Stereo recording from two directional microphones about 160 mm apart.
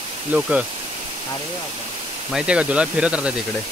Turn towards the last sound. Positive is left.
turn(degrees=-5)  # may be behind; listen again after turning